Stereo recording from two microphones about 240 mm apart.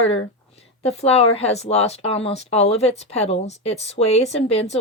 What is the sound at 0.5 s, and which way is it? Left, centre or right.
Speech, left.